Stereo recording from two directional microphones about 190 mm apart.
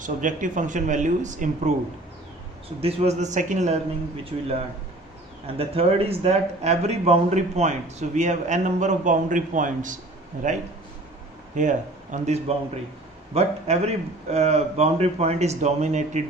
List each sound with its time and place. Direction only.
0.0 s speech: 45° right (ahead or behind)
2.8 s speech: 35° right (ahead or behind)
5.5 s speech: 30° right (ahead or behind)
11.5 s speech: 40° right (ahead or behind)